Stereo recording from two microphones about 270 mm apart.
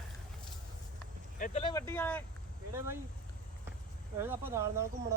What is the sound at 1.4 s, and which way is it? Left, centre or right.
Speech, left.